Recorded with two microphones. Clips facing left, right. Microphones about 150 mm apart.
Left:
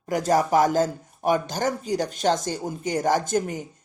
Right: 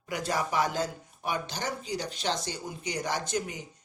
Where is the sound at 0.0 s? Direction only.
45° left (ahead or behind).